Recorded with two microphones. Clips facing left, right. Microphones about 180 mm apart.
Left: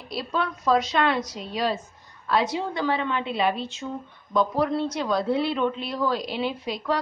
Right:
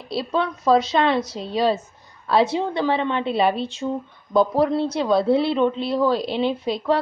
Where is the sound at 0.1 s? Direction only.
30° right (ahead or behind).